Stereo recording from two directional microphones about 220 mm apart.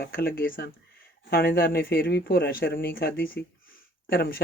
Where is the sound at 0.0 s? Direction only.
40° left (ahead or behind).